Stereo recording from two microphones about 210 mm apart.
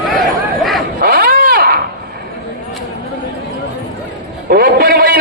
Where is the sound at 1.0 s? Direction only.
45° right (ahead or behind).